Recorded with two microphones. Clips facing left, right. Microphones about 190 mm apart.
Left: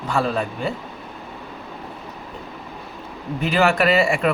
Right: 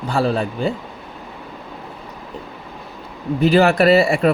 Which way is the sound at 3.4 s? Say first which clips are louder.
Right 5 dB; 35° right (ahead or behind).